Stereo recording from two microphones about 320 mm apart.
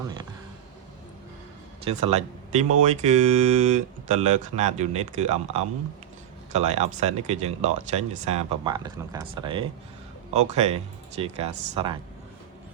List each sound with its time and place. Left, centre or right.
1.8 s speech: centre